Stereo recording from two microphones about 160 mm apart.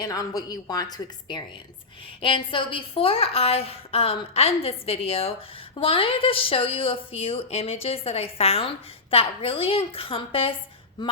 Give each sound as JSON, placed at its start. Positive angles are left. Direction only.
{"t": 0.0, "sound": "a woman's voice", "side_deg": 25}